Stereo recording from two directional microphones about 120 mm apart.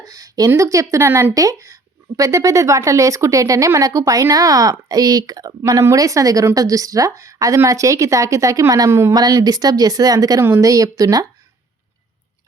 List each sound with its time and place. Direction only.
0.0 s speech: 30° right (ahead or behind)